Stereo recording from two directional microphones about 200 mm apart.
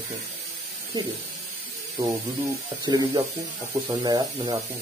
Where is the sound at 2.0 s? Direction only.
15° right (ahead or behind).